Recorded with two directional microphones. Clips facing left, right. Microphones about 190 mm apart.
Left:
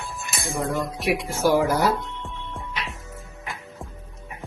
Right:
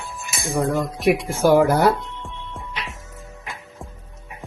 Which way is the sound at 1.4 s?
55° right (ahead or behind).